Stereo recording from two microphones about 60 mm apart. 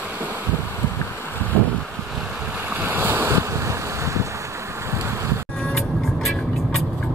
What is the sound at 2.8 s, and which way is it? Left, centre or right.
Waves, right.